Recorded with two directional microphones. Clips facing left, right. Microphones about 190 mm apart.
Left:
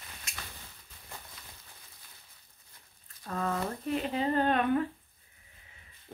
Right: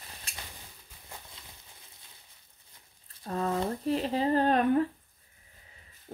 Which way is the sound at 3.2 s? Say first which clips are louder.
Right 3 dB; 30° right (ahead or behind).